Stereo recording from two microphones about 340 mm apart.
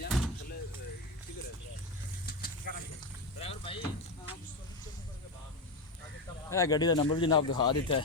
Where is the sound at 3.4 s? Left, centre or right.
Centre.